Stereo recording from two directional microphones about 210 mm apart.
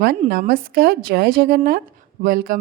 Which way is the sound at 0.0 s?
45° right (ahead or behind).